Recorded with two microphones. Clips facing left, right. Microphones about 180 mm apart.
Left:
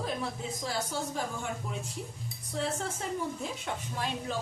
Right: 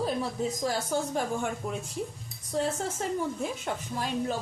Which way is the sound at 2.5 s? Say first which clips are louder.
Right 4 dB; 40° right (ahead or behind).